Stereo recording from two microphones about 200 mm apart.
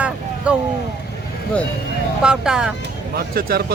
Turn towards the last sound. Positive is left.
turn(degrees=-50)  # may be behind; listen again after turning